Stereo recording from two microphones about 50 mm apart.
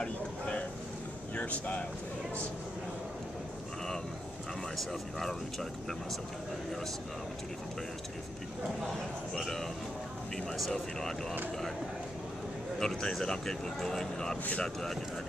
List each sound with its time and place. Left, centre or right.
0.0 s a sound: left
1.3 s speech: left
4.7 s speech: centre
10.3 s speech: centre
12.7 s speech: centre